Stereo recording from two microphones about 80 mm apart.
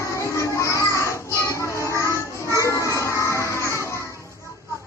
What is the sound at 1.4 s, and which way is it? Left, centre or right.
Music, left.